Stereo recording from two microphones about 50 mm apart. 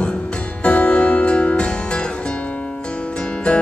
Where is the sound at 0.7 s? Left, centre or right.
Left.